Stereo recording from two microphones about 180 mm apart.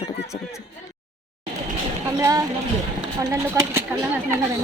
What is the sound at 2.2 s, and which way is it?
A woman's voice, 20° right (ahead or behind).